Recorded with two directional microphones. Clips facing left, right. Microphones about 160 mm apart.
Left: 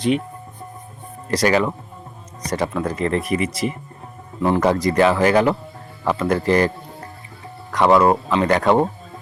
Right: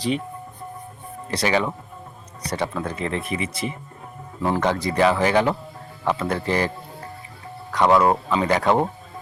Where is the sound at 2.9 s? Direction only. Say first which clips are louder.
Left 6 dB; 35° left (ahead or behind).